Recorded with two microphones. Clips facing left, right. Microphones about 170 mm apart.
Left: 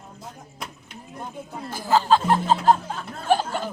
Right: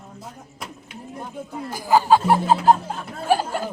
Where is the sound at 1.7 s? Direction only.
15° right (ahead or behind).